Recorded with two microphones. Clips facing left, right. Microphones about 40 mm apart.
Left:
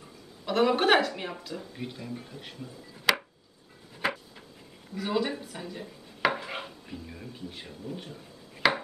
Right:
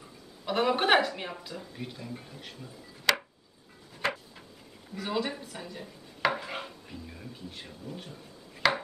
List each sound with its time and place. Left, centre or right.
0.5 s speech: centre
4.0 s a sound: centre
4.9 s speech: centre